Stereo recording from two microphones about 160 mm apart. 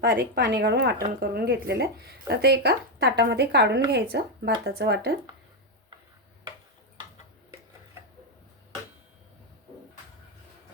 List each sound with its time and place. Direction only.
0.1 s speech: 90° right